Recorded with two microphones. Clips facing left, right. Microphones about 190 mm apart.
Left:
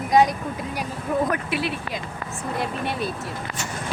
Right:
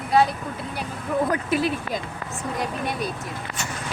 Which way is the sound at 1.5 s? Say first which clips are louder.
Right 3 dB; 45° right (ahead or behind).